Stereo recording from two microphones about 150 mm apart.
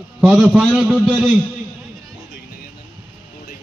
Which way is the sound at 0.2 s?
5° right (ahead or behind).